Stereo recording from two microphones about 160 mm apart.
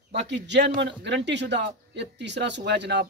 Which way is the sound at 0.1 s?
90° right.